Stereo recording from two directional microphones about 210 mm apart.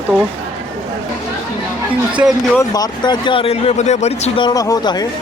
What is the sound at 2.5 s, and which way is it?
Speech, 20° left (ahead or behind).